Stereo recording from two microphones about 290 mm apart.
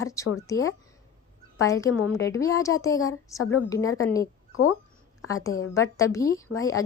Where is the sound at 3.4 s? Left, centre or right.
Left.